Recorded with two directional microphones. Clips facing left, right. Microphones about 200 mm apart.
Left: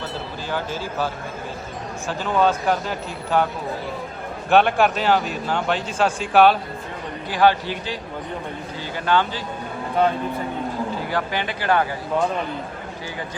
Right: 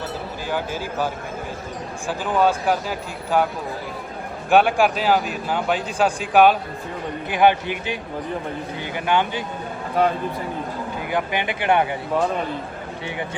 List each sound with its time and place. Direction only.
0.5 s speech: 15° right (ahead or behind)
4.4 s a man's voice: 10° right (ahead or behind)
9.1 s speech: 15° right (ahead or behind)
11.1 s speech: 20° right (ahead or behind)